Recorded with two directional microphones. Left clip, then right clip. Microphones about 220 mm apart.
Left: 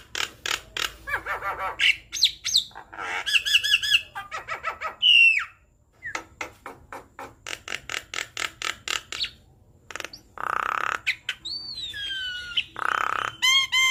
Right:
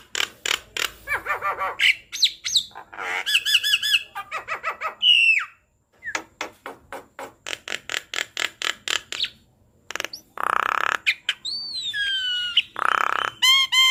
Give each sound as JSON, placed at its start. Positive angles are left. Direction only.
{"t": 0.1, "sound": "creak", "side_deg": -15}
{"t": 5.0, "sound": "a sound", "side_deg": -10}
{"t": 6.1, "sound": "music", "side_deg": -20}
{"t": 9.9, "sound": "bird", "side_deg": -25}
{"t": 12.5, "sound": "grunt", "side_deg": -20}